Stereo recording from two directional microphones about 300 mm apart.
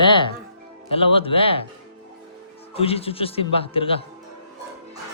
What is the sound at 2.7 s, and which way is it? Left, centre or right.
A man's voice, centre.